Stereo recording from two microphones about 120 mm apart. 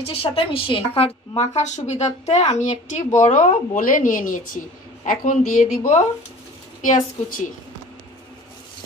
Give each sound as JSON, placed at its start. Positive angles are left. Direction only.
{"t": 0.0, "sound": "a woman's voice", "side_deg": 50}